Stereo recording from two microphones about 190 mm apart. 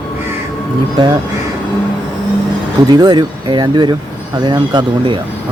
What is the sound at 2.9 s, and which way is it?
Speech, 20° right (ahead or behind).